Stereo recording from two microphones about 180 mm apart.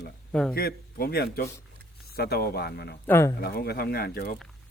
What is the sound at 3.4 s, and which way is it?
Speech, 60° left (ahead or behind).